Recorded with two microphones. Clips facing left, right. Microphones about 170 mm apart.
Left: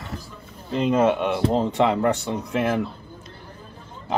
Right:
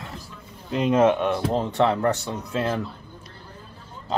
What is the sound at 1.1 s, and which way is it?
Speech, 10° left (ahead or behind).